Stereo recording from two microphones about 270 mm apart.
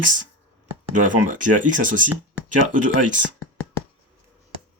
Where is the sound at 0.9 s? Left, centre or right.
Right.